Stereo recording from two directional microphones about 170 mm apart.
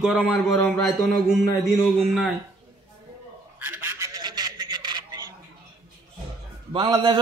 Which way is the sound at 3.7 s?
10° right (ahead or behind).